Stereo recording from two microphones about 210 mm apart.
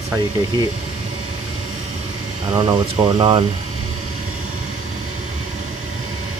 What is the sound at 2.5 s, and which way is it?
Speech, 25° right (ahead or behind).